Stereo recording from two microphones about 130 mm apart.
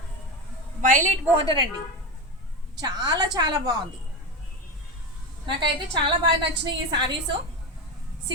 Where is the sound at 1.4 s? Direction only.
40° right (ahead or behind).